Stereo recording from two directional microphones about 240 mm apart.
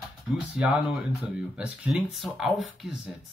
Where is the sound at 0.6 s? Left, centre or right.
Centre.